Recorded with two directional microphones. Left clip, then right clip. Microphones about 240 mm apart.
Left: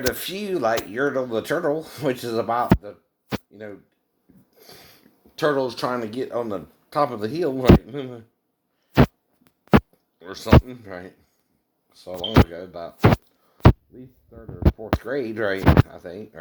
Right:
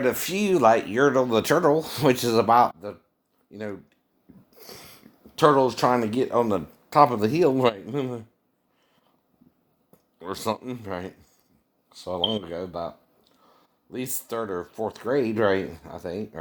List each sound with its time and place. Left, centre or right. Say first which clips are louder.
0.1 s speech: right 3 dB; right
4.5 s a sound: right 3 dB; right
4.8 s sniff: right 2 dB; centre
5.4 s speech: right 3 dB; right
10.2 s speech: left 9 dB; right
13.9 s speech: right 15 dB; right
15.0 s speech: right 5 dB; right